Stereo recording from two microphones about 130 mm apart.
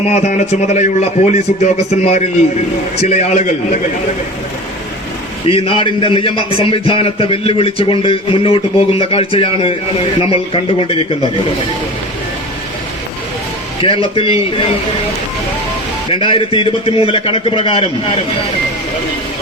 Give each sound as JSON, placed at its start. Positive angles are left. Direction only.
{"t": 0.1, "sound": "a man's voice", "side_deg": 60}
{"t": 5.5, "sound": "speech", "side_deg": 45}
{"t": 13.8, "sound": "speech", "side_deg": 45}
{"t": 16.0, "sound": "speech", "side_deg": 40}